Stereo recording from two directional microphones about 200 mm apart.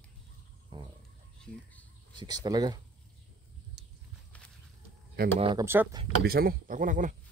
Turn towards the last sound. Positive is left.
turn(degrees=-40)  # may be behind; listen again after turning